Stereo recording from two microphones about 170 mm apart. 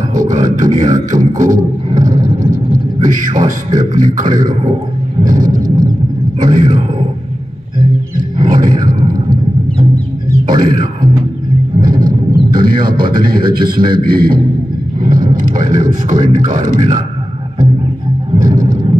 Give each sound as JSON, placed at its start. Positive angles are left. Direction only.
{"t": 0.1, "sound": "a sound", "side_deg": -50}
{"t": 0.6, "sound": "speech", "side_deg": -50}
{"t": 1.1, "sound": "a sound", "side_deg": -50}
{"t": 5.2, "sound": "vehicle", "side_deg": -50}
{"t": 6.4, "sound": "speech", "side_deg": -50}
{"t": 8.5, "sound": "a sound", "side_deg": -55}
{"t": 10.4, "sound": "speech", "side_deg": -55}
{"t": 11.8, "sound": "vehicle", "side_deg": -55}
{"t": 12.5, "sound": "speech", "side_deg": -55}
{"t": 18.4, "sound": "vehicle", "side_deg": -50}